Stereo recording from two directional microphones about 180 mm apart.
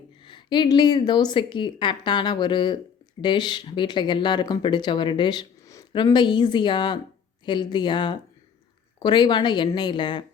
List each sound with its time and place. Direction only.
0.3 s speech: 25° left (ahead or behind)